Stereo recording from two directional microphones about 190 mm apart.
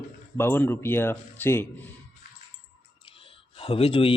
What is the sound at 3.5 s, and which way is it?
Speech, 30° left (ahead or behind).